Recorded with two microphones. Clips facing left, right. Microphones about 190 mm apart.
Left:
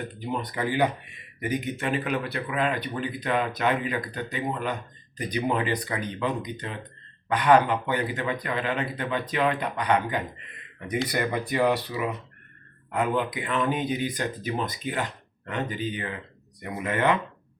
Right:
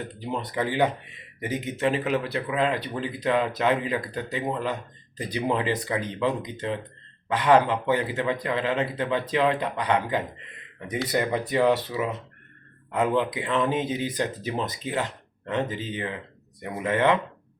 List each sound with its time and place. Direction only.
0.3 s speech: 25° right (ahead or behind)